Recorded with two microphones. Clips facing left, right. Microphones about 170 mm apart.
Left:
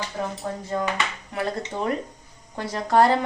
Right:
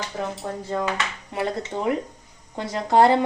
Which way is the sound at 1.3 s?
20° right (ahead or behind).